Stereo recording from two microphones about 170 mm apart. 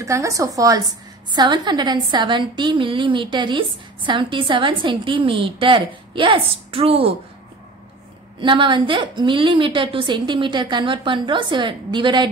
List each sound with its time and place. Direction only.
0.0 s a woman's voice: 20° right (ahead or behind); by 7.2 s 35° right (ahead or behind)
8.4 s a woman's voice: 30° right (ahead or behind)